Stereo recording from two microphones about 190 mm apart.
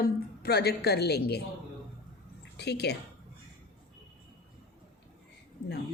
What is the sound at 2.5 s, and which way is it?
Speech, 60° left (ahead or behind).